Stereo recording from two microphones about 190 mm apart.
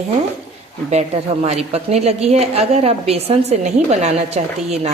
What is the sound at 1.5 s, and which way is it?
A woman's voice, 35° right (ahead or behind).